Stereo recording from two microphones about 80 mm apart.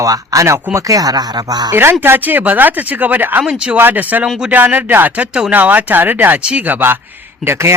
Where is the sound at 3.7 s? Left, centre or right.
Right.